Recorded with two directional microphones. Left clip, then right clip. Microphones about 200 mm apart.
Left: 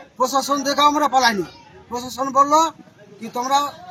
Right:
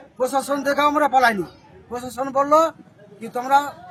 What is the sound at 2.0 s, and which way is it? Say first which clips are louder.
Speech: left 3 dB; 25° right (ahead or behind).